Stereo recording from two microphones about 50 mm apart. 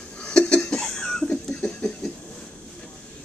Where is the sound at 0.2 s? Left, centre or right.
Centre.